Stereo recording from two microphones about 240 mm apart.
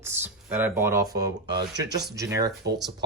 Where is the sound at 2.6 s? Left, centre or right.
Right.